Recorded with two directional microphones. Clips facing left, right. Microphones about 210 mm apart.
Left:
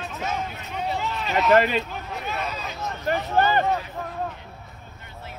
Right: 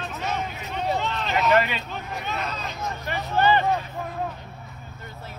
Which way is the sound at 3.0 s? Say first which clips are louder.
Left 2 dB; 50° left (ahead or behind).